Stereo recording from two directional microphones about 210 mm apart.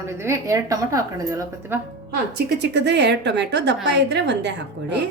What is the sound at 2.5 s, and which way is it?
A woman's voice, 55° right (ahead or behind).